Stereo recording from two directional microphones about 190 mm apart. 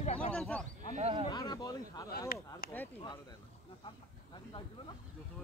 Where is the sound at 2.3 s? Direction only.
55° left (ahead or behind).